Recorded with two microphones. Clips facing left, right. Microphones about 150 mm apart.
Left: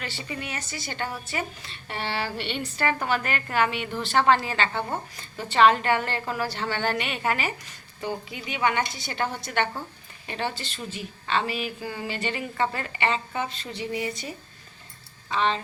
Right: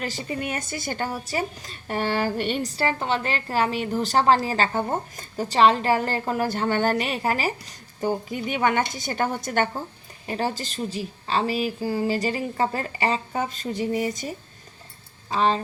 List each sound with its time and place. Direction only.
0.0 s a woman's voice: 40° right (ahead or behind)